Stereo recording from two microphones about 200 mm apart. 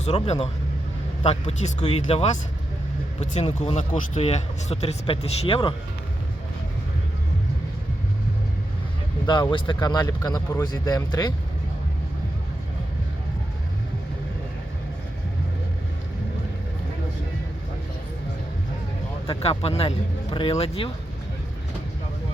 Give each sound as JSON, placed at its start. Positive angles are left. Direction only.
{"t": 0.0, "sound": "speech", "side_deg": 30}
{"t": 9.2, "sound": "speech", "side_deg": 20}
{"t": 19.3, "sound": "speech", "side_deg": 30}